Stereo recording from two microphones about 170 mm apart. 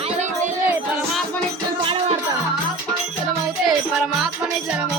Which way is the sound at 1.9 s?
35° right (ahead or behind).